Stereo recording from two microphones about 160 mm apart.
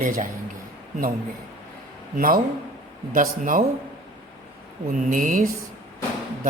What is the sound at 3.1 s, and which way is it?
Speech, 55° right (ahead or behind).